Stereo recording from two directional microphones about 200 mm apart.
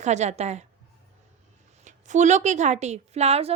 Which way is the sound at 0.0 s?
35° right (ahead or behind).